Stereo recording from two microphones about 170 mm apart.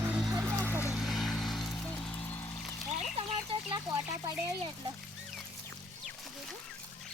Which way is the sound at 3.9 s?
20° right (ahead or behind).